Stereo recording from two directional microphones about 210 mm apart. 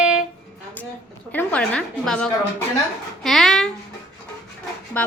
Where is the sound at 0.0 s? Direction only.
5° right (ahead or behind).